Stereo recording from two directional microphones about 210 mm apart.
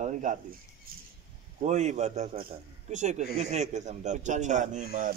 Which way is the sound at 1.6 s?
35° right (ahead or behind).